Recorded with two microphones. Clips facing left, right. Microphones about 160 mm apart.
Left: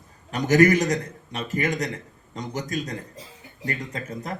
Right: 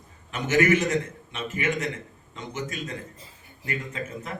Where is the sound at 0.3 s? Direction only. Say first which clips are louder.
Left 4 dB; 40° left (ahead or behind).